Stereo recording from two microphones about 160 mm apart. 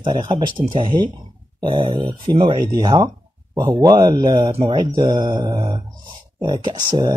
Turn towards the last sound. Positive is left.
turn(degrees=-25)  # may be behind; listen again after turning